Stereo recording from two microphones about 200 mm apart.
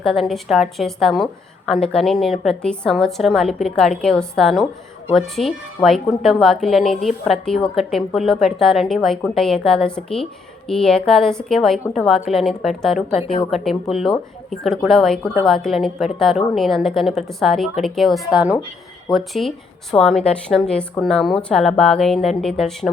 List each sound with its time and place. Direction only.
0.0 s a woman's voice: centre (ahead or behind)
13.1 s a woman's voice: 30° left (ahead or behind)
13.5 s a woman's voice: centre (ahead or behind)